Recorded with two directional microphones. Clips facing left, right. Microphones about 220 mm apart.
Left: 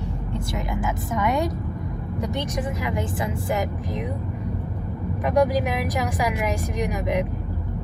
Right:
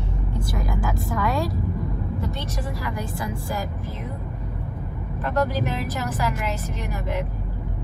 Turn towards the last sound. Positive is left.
turn(degrees=15)  # may be behind; listen again after turning